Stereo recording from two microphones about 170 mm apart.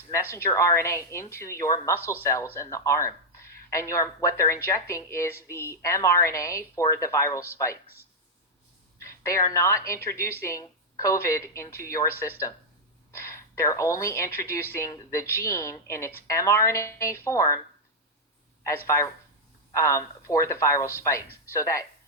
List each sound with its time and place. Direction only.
0.1 s a woman's voice: 15° left (ahead or behind)
9.0 s a woman's voice: 15° left (ahead or behind)
19.7 s a woman's voice: 20° left (ahead or behind)